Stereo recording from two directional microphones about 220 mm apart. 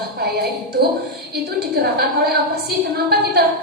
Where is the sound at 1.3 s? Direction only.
45° right (ahead or behind).